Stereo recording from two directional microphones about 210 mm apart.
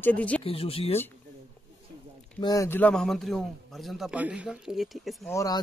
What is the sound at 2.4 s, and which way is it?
A man's voice, 15° left (ahead or behind).